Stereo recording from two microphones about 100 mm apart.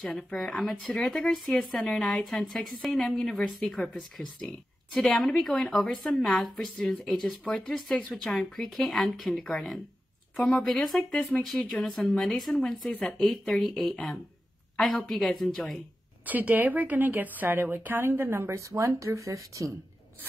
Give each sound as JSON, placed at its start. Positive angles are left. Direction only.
{"t": 0.0, "sound": "speech", "side_deg": 10}
{"t": 11.4, "sound": "speech", "side_deg": 0}
{"t": 16.3, "sound": "a woman's voice", "side_deg": -15}